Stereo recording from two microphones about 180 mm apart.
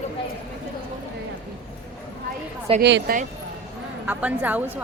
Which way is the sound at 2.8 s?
70° right (ahead or behind).